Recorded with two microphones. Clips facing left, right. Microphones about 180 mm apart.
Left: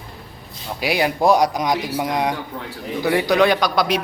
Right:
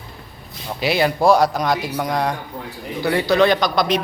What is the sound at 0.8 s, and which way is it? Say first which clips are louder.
A man's voice: right 1 dB; 15° left (ahead or behind).